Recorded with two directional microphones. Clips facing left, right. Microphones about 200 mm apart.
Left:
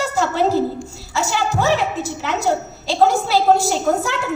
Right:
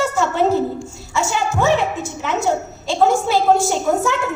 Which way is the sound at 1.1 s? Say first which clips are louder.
Even; 35° left (ahead or behind).